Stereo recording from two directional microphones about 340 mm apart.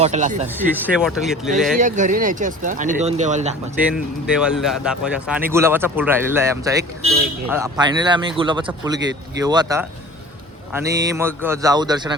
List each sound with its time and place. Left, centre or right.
0.0 s speech: right
0.4 s speech: centre
1.8 s speech: right
3.8 s a man's voice: centre